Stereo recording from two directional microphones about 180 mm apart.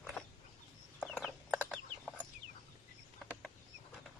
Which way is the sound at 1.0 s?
10° left (ahead or behind).